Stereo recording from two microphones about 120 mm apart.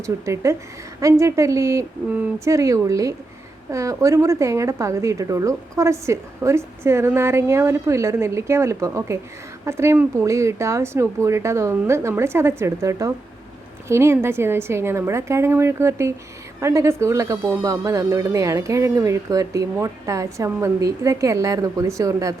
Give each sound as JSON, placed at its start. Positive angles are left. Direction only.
{"t": 0.4, "sound": "a woman's voice", "side_deg": -25}